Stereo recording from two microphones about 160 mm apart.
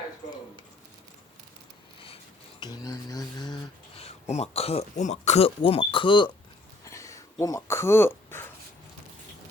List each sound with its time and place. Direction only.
2.6 s speech: 25° left (ahead or behind)
3.9 s speech: 40° left (ahead or behind)
6.8 s a sound: 20° left (ahead or behind)